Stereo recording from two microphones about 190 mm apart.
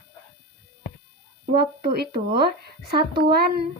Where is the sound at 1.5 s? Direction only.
55° right (ahead or behind).